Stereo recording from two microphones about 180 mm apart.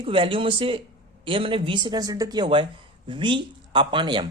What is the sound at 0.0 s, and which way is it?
Speech, 30° right (ahead or behind).